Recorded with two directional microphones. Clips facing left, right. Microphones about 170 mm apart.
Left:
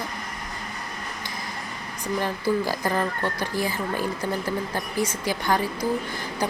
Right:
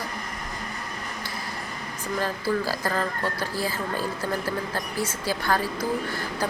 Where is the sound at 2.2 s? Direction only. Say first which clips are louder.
Left 2 dB; 15° left (ahead or behind).